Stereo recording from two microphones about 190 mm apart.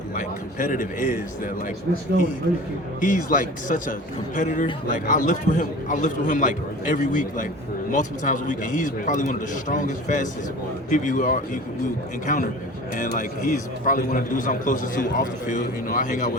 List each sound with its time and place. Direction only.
0.2 s a man's voice: 45° left (ahead or behind)
3.0 s a man's voice: 45° left (ahead or behind)